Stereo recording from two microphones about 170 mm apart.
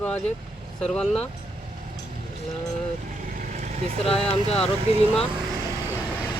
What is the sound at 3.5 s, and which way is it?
Vehicle, 45° right (ahead or behind).